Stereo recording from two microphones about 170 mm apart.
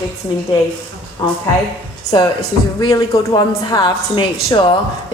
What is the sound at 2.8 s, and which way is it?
A woman's voice, 20° left (ahead or behind).